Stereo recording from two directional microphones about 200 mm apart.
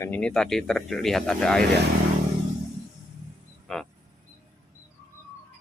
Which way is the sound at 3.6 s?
Centre (ahead or behind).